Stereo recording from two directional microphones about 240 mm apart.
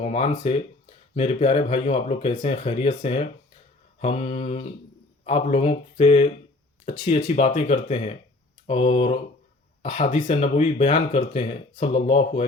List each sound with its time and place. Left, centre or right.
0.0 s speech: left